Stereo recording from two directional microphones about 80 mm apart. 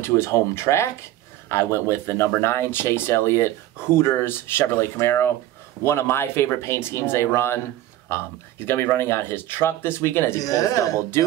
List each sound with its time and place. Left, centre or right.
0.0 s speech: left
10.4 s speech: left